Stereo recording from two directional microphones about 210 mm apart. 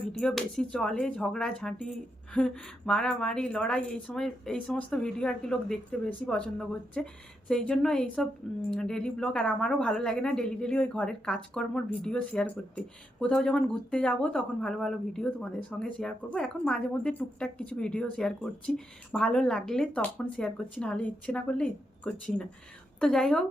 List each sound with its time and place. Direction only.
0.1 s a woman's voice: 5° left (ahead or behind)